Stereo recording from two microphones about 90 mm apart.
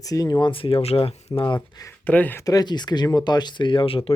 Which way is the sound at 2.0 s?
20° left (ahead or behind).